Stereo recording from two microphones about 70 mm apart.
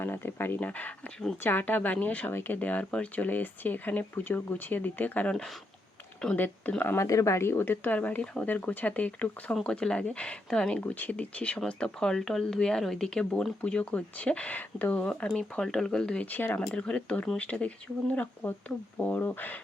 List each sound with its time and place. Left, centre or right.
0.0 s speech: left
6.3 s speech: left
6.9 s speech: left; by 13.2 s centre
13.7 s speech: centre
16.2 s speech: left
16.6 s speech: centre
18.4 s speech: left